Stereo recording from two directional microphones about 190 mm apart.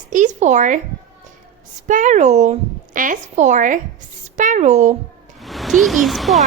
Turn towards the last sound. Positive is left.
turn(degrees=0)  # may be behind; listen again after turning